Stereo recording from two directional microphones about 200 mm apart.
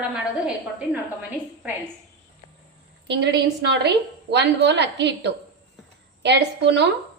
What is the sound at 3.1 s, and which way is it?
A woman's voice, 60° right (ahead or behind).